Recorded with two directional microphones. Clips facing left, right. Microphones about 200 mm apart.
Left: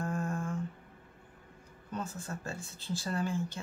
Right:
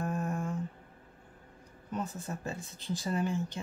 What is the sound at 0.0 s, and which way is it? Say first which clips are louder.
Humming: right 1 dB; 20° right (ahead or behind).